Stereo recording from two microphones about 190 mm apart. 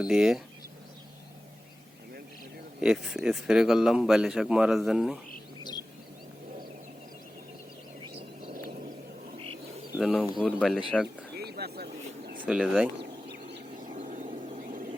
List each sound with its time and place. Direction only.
0.0 s speech: 5° right (ahead or behind)
2.8 s speech: 5° right (ahead or behind)
8.4 s a sound: 50° right (ahead or behind)
9.4 s wild animals: 30° right (ahead or behind)
9.9 s speech: centre (ahead or behind)
11.3 s a sound: 55° right (ahead or behind)
12.4 s speech: 5° right (ahead or behind)
13.0 s bird: 60° right (ahead or behind)
13.9 s vehicle: 40° right (ahead or behind)
14.6 s a sound: 45° right (ahead or behind)